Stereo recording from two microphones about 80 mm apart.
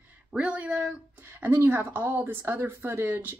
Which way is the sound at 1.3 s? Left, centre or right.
Right.